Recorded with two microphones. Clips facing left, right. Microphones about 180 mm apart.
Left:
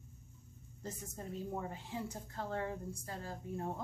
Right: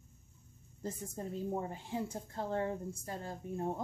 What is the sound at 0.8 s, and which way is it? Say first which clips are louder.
A woman's voice: right 4 dB; 35° right (ahead or behind).